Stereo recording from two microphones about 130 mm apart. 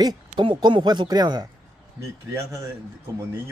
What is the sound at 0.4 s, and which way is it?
Speech, 35° right (ahead or behind).